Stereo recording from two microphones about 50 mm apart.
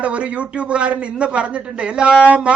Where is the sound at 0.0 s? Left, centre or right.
Right.